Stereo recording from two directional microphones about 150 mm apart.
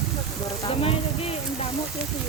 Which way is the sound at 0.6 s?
40° left (ahead or behind).